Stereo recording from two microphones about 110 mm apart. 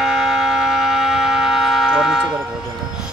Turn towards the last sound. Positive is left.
turn(degrees=-5)  # may be behind; listen again after turning